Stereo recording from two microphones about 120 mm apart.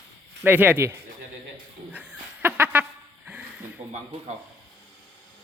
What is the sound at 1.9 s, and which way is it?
Chicken, 10° right (ahead or behind).